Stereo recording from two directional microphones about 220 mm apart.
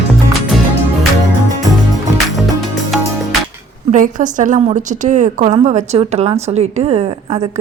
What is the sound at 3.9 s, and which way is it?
A woman's voice, 35° right (ahead or behind).